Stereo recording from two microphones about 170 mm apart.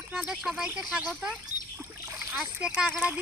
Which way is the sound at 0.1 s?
5° right (ahead or behind).